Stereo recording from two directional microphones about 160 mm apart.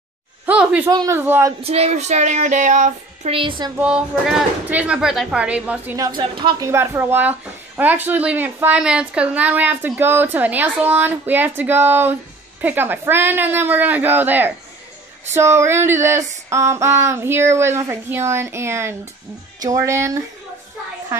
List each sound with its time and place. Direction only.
0.5 s a sound: 10° right (ahead or behind)
0.8 s a woman's voice: 20° right (ahead or behind)
1.6 s speech: 40° right (ahead or behind)
3.3 s a woman's voice: 30° right (ahead or behind)
3.7 s a woman's voice: 5° right (ahead or behind)
5.9 s a woman's voice: 25° right (ahead or behind)
6.7 s a woman's voice: 15° right (ahead or behind)